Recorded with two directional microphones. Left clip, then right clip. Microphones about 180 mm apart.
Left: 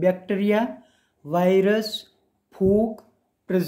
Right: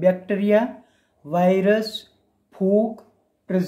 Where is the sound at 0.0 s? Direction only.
20° left (ahead or behind).